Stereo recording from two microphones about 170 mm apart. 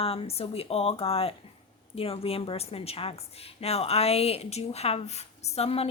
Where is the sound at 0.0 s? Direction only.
35° left (ahead or behind).